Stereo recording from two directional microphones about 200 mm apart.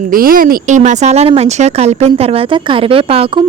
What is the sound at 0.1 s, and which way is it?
Speech, 45° right (ahead or behind).